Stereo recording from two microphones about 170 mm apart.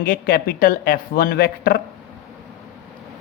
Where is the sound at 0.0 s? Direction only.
60° left (ahead or behind).